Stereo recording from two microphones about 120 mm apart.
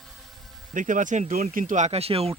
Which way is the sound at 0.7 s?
90° right.